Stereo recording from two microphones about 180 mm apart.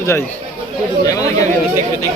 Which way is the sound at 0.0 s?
15° left (ahead or behind).